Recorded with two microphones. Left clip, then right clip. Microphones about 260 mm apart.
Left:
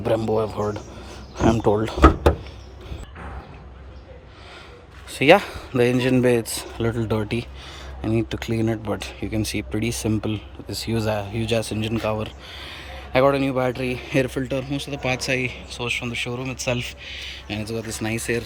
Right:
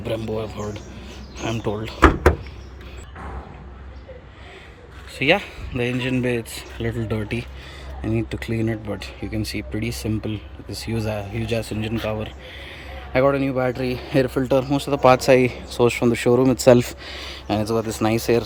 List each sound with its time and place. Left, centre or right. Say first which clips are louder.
0.0 s speech: left 5 dB; centre
5.2 s speech: left 4 dB; centre
9.9 s speech: left 2 dB; left
10.2 s speech: left 2 dB; centre